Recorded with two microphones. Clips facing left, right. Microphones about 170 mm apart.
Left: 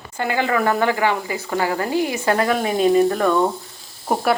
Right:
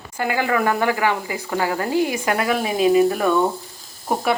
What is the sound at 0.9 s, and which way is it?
Speech, 20° left (ahead or behind).